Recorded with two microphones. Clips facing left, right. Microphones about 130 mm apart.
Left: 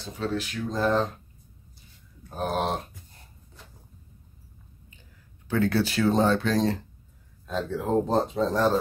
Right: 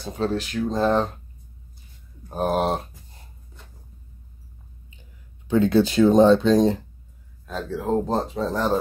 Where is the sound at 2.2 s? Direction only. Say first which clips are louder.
Right 5 dB; 40° right (ahead or behind).